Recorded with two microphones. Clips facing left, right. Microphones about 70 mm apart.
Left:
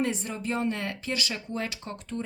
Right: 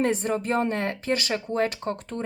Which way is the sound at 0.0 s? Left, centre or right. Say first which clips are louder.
Right 6 dB; right.